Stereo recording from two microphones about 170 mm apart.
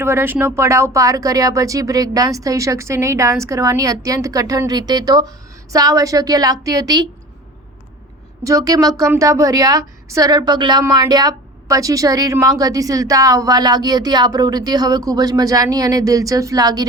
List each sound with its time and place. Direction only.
0.0 s a woman's voice: 15° right (ahead or behind)
8.4 s a woman's voice: 20° right (ahead or behind)